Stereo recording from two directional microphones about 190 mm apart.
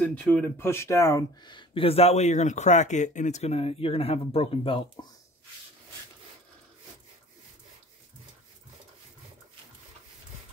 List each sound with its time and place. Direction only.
0.0 s speech: 5° left (ahead or behind); by 4.8 s 30° left (ahead or behind)